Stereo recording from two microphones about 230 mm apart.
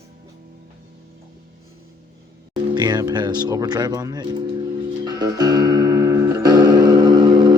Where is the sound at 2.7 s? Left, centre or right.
Centre.